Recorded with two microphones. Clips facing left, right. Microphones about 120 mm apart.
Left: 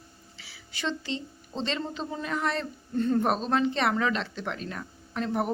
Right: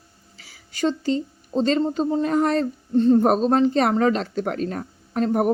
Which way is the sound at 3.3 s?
40° right (ahead or behind).